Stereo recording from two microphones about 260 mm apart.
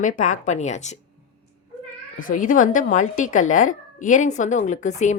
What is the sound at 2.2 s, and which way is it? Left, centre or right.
A woman's voice, left.